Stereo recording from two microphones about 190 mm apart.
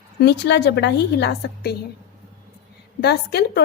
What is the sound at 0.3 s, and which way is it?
A woman's voice, 60° left (ahead or behind).